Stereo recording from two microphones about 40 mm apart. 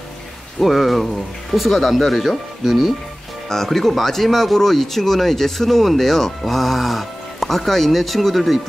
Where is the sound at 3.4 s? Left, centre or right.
Centre.